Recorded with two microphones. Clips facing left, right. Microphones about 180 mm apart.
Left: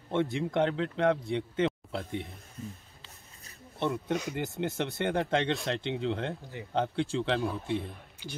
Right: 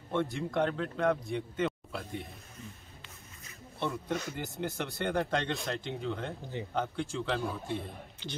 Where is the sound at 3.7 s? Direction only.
20° left (ahead or behind).